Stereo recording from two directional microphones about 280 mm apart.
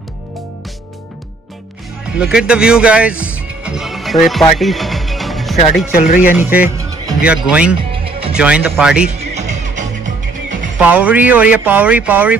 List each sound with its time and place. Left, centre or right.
2.1 s speech: centre
5.9 s speech: left
6.3 s speech: centre
7.9 s music: centre
8.4 s speech: centre
9.3 s music: right
10.8 s speech: centre